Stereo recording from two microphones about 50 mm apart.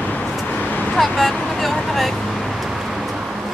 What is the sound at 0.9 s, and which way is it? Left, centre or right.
Speech, centre.